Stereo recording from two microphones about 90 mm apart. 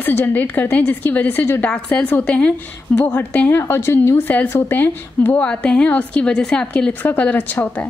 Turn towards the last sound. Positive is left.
turn(degrees=20)  # may be behind; listen again after turning